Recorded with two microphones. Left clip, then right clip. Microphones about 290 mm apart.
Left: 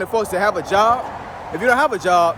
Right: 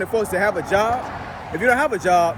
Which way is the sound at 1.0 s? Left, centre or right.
Left.